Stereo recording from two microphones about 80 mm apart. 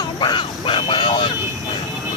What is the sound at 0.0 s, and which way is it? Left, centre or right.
Vehicle, left.